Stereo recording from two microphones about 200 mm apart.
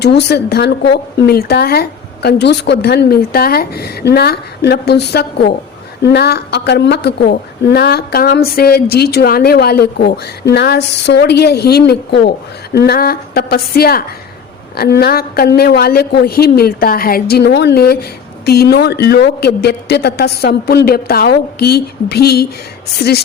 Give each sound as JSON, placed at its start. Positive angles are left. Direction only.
{"t": 0.0, "sound": "a woman's voice", "side_deg": 55}